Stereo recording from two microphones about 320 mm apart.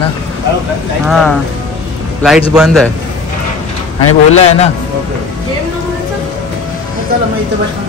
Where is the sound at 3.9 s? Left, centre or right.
Centre.